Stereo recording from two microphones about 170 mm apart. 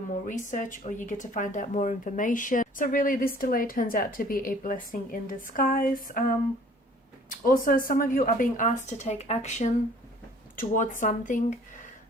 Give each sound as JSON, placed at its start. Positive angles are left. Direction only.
{"t": 0.3, "sound": "speech", "side_deg": 50}
{"t": 7.3, "sound": "speech", "side_deg": 55}